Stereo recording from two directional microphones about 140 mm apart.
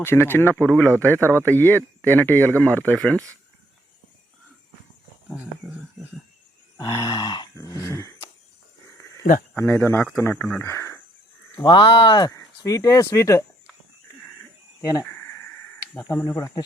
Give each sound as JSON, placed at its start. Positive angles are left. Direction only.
{"t": 0.0, "sound": "speech", "side_deg": 15}
{"t": 6.7, "sound": "speech", "side_deg": 25}
{"t": 9.6, "sound": "speech", "side_deg": 15}
{"t": 11.5, "sound": "speech", "side_deg": 35}
{"t": 14.8, "sound": "speech", "side_deg": 25}